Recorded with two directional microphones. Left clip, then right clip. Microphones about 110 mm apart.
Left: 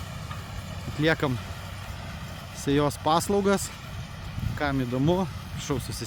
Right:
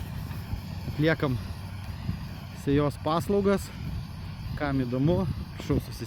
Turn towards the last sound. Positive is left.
turn(degrees=40)  # may be behind; listen again after turning